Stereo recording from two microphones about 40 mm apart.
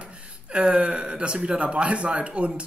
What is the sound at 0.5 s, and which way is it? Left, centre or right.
Speech, right.